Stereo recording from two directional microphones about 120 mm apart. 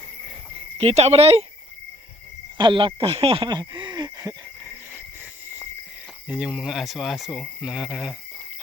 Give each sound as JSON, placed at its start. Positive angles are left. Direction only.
{"t": 0.8, "sound": "speech", "side_deg": -60}
{"t": 2.6, "sound": "speech", "side_deg": -40}
{"t": 6.2, "sound": "speech", "side_deg": -10}